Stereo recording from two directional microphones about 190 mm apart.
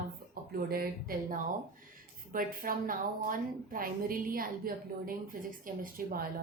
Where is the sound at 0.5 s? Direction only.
50° right (ahead or behind).